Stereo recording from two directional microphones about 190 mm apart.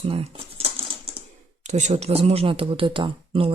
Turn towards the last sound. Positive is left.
turn(degrees=-25)  # may be behind; listen again after turning